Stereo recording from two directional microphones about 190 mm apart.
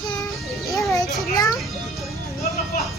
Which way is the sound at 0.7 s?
Centre (ahead or behind).